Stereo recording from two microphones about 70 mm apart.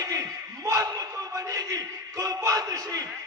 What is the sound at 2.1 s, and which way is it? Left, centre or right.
Speech, right.